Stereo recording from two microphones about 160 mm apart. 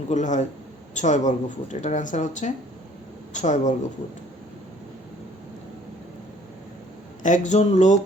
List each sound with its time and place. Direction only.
0.1 s speech: 50° left (ahead or behind)
7.2 s speech: 50° left (ahead or behind)